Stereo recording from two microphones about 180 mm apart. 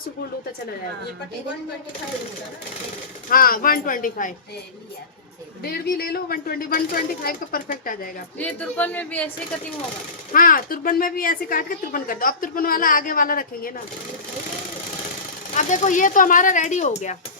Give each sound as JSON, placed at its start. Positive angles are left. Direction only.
{"t": 3.2, "sound": "a woman's voice", "side_deg": 50}
{"t": 5.6, "sound": "speech", "side_deg": 60}
{"t": 8.4, "sound": "speech", "side_deg": 10}
{"t": 10.3, "sound": "a woman's voice", "side_deg": 50}
{"t": 15.5, "sound": "a woman's voice", "side_deg": 45}